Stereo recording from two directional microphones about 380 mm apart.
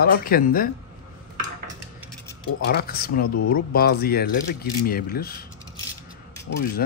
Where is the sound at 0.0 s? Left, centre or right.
Left.